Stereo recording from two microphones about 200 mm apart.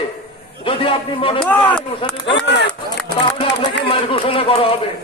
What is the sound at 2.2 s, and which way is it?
Speech, 60° left (ahead or behind).